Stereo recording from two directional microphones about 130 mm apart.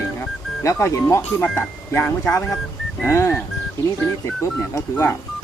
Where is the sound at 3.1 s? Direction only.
20° left (ahead or behind).